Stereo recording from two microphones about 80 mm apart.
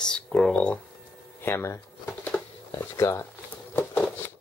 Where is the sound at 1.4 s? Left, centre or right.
Left.